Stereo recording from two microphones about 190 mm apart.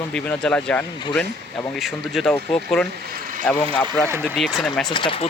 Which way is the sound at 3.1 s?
45° right (ahead or behind).